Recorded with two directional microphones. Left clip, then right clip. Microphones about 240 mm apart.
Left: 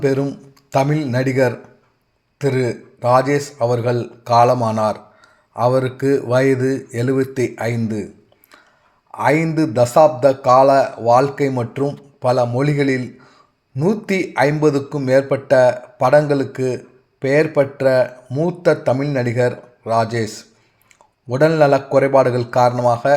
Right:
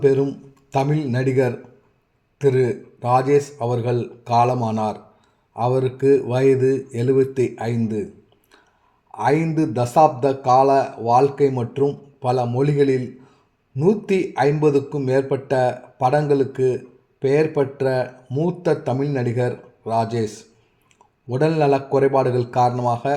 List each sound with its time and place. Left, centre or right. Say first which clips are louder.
0.0 s a man's voice: right 1 dB; left
9.1 s a man's voice: left 3 dB; left